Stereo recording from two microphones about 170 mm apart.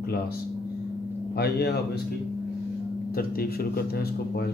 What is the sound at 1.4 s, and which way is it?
Speech, 70° left (ahead or behind).